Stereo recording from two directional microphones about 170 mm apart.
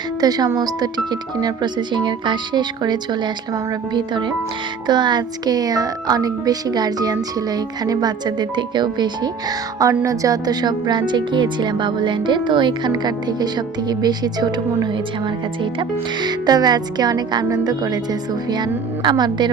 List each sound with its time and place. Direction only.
0.2 s speech: 25° right (ahead or behind)